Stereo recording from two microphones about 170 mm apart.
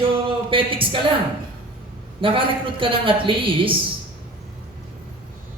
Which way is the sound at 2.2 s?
30° right (ahead or behind).